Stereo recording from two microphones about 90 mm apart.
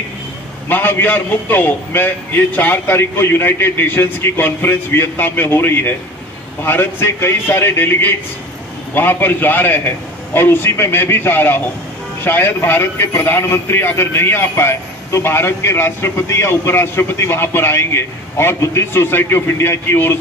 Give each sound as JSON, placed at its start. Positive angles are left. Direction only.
{"t": 0.7, "sound": "a man's voice", "side_deg": 20}